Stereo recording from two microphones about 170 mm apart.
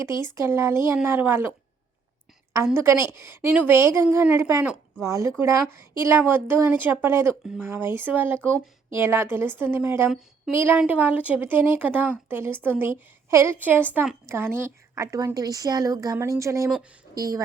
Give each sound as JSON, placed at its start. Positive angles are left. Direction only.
{"t": 0.3, "sound": "speech", "side_deg": -15}
{"t": 2.7, "sound": "a woman's voice", "side_deg": -15}
{"t": 5.0, "sound": "a woman's voice", "side_deg": -15}